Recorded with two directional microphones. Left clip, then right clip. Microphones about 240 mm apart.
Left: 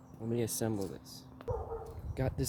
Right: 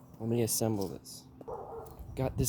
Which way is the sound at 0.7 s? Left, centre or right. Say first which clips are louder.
Right 3 dB; centre.